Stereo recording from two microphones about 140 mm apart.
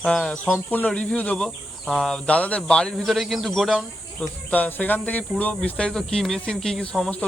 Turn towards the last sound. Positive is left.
turn(degrees=5)  # may be behind; listen again after turning